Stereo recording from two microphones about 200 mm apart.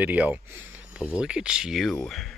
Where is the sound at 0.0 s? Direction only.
10° right (ahead or behind).